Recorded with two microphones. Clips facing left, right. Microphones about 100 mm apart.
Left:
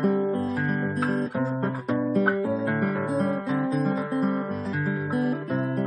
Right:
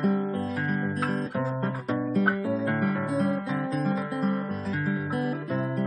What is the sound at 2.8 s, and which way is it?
Guitar, 35° left (ahead or behind).